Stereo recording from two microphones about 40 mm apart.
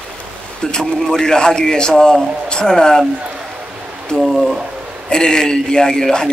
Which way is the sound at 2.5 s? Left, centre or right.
Centre.